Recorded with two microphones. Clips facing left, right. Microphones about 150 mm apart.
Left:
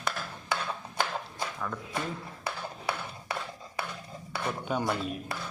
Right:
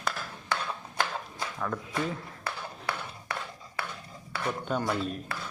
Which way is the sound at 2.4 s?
15° left (ahead or behind).